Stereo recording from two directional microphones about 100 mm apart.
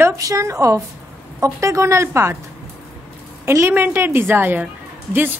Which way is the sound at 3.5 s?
20° right (ahead or behind).